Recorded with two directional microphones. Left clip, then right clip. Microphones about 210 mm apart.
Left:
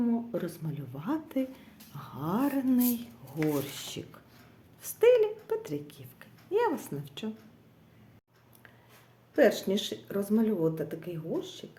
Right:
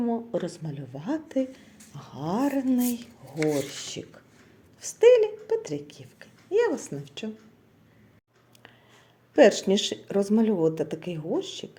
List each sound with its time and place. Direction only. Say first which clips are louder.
0.1 s speech: right 4 dB; 5° left (ahead or behind)
9.3 s speech: right 6 dB; 25° right (ahead or behind)